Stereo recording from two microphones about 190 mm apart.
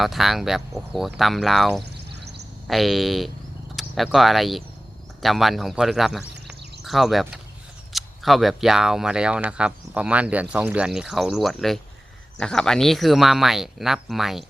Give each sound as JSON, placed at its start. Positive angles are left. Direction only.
{"t": 0.0, "sound": "speech", "side_deg": 0}
{"t": 1.8, "sound": "a sound", "side_deg": -60}
{"t": 2.6, "sound": "speech", "side_deg": 0}